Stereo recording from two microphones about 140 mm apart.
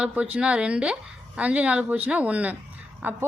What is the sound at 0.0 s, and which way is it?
A woman's voice, 10° right (ahead or behind).